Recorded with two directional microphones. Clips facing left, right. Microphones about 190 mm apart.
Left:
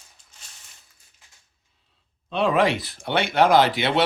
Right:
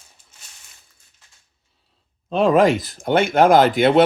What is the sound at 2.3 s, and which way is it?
Speech, 40° right (ahead or behind).